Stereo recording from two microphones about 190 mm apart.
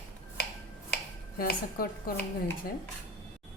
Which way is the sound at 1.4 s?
50° left (ahead or behind).